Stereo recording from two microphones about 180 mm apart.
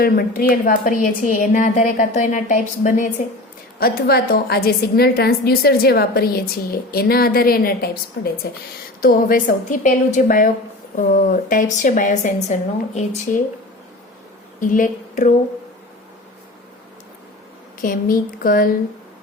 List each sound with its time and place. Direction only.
0.0 s a woman's voice: 55° left (ahead or behind)
3.8 s a woman's voice: 60° left (ahead or behind); by 13.4 s 40° left (ahead or behind)
14.6 s a woman's voice: 45° left (ahead or behind)
17.7 s a woman's voice: 50° left (ahead or behind)